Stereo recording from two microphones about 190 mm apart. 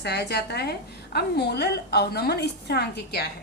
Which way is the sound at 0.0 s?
60° left (ahead or behind).